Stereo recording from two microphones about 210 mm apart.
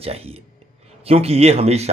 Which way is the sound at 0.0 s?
30° right (ahead or behind).